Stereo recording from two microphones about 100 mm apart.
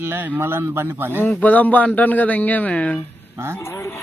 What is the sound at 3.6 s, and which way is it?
Speech, 25° left (ahead or behind).